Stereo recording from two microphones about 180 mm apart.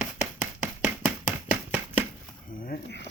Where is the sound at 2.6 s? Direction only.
60° left (ahead or behind).